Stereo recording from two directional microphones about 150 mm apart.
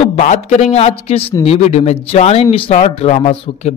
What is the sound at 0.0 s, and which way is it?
A man's voice, 50° left (ahead or behind).